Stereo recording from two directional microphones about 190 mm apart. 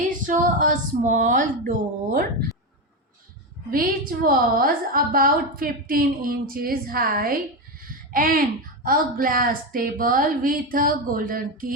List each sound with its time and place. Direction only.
0.3 s a woman's voice: 45° right (ahead or behind)
3.7 s a woman's voice: 50° right (ahead or behind)